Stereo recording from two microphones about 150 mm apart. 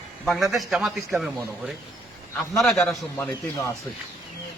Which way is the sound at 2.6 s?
Centre (ahead or behind).